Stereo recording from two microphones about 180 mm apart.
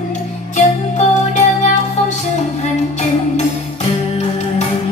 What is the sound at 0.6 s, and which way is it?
Music, 40° left (ahead or behind).